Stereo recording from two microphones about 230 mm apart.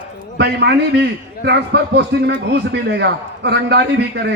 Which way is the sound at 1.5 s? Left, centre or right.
Right.